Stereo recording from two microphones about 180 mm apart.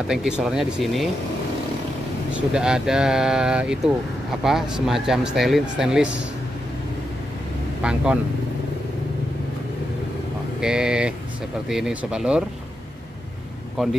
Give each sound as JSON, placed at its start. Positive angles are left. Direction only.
{"t": 0.0, "sound": "speech", "side_deg": -5}
{"t": 2.3, "sound": "speech", "side_deg": -5}
{"t": 7.8, "sound": "speech", "side_deg": -5}
{"t": 10.6, "sound": "speech", "side_deg": -5}